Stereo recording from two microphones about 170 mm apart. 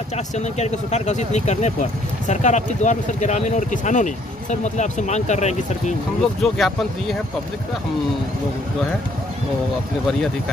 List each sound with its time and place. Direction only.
0.4 s speech: 40° left (ahead or behind)
6.4 s speech: centre (ahead or behind)